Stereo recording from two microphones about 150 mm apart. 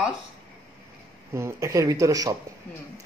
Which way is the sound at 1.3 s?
20° right (ahead or behind).